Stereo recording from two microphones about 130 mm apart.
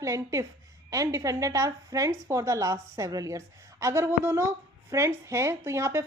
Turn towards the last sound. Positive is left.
turn(degrees=-20)  # may be behind; listen again after turning